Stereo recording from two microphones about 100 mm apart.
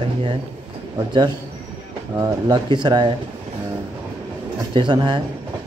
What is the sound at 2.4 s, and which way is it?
Speech, 50° right (ahead or behind).